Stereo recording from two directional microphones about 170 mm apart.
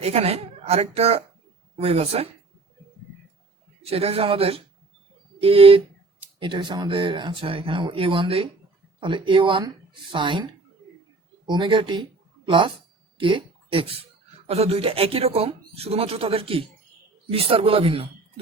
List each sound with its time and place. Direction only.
0.0 s speech: 35° right (ahead or behind)
3.8 s speech: 35° right (ahead or behind)
13.1 s a sound: 30° right (ahead or behind)
14.4 s speech: 35° right (ahead or behind)